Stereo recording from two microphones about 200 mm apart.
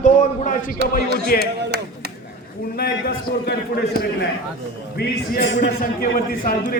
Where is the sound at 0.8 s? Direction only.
55° right (ahead or behind).